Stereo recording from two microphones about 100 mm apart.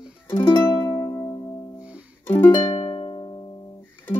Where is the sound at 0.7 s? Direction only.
45° left (ahead or behind).